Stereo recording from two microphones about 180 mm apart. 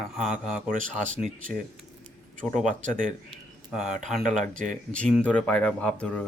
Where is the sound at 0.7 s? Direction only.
45° right (ahead or behind).